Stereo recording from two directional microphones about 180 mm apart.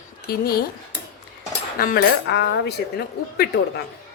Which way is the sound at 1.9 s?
70° left (ahead or behind).